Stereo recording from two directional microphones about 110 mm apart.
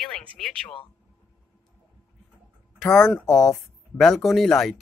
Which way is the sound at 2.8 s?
25° left (ahead or behind).